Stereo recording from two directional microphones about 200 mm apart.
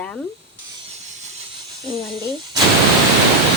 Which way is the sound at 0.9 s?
35° right (ahead or behind).